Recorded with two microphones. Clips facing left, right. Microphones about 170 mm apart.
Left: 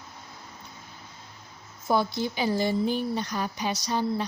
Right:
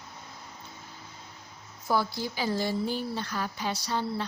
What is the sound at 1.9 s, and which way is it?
Speech, 20° left (ahead or behind).